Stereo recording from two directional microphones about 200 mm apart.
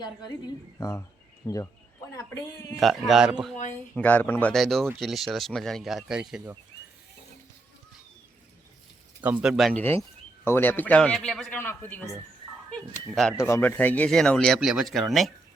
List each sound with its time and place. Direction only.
0.8 s a man's voice: 15° left (ahead or behind)
3.1 s speech: 5° right (ahead or behind)
3.9 s a man's voice: 5° left (ahead or behind)
9.2 s speech: 5° right (ahead or behind)
9.8 s a man's voice: 10° left (ahead or behind)
13.1 s speech: centre (ahead or behind)